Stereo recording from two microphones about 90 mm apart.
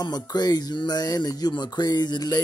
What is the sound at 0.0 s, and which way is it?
Speech, 45° left (ahead or behind).